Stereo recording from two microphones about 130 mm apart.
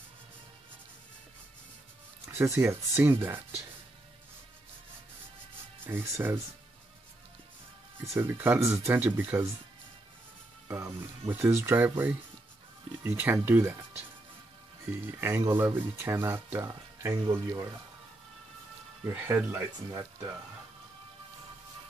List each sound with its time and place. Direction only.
2.2 s speech: 20° right (ahead or behind)
5.9 s speech: 15° right (ahead or behind)
8.0 s speech: 20° right (ahead or behind)
10.7 s speech: 15° right (ahead or behind)
13.0 s speech: 15° right (ahead or behind)
14.9 s speech: 15° right (ahead or behind)
19.0 s speech: 20° right (ahead or behind)